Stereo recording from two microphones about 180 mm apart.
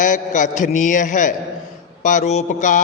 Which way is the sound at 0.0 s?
45° left (ahead or behind).